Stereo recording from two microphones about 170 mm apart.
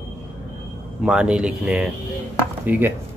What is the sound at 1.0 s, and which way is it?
Speech, 5° right (ahead or behind).